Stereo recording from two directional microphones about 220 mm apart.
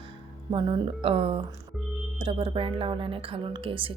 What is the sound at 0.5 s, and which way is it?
Speech, 25° right (ahead or behind).